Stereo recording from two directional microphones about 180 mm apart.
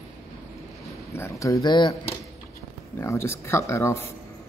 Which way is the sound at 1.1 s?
15° left (ahead or behind).